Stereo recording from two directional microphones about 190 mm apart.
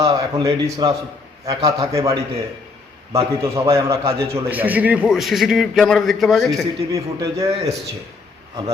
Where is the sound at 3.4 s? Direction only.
15° right (ahead or behind); by 6.6 s centre (ahead or behind).